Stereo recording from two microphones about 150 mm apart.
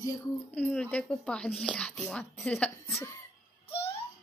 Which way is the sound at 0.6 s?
5° left (ahead or behind).